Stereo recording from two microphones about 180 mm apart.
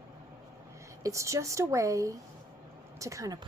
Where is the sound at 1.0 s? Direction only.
15° right (ahead or behind).